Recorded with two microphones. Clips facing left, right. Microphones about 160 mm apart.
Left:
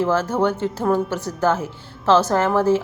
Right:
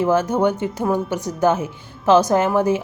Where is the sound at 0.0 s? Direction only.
15° right (ahead or behind).